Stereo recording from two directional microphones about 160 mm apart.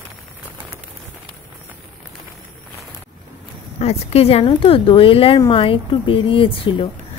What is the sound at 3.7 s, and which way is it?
A woman's voice, 40° left (ahead or behind).